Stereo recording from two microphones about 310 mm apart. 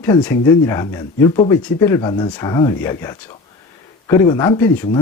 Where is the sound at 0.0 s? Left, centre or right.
Centre.